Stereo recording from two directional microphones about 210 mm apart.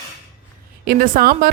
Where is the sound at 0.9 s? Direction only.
45° right (ahead or behind).